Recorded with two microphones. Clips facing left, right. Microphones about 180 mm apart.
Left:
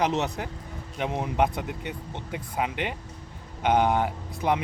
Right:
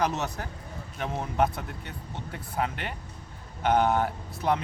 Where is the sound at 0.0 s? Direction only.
15° left (ahead or behind).